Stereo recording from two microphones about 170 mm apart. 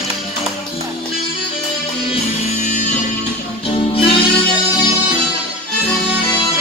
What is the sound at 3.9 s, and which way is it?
Music, 35° left (ahead or behind).